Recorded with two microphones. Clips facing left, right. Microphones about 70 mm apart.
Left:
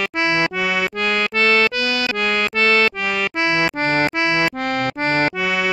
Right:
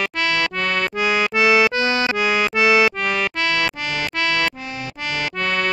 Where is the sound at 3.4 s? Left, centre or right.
Left.